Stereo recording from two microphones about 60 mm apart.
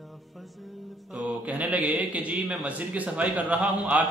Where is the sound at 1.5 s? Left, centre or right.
Right.